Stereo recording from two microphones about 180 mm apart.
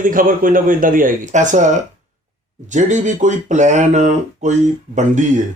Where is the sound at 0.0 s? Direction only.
50° right (ahead or behind).